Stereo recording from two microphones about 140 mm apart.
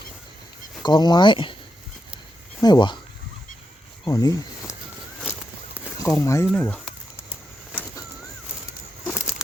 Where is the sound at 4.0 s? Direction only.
25° left (ahead or behind).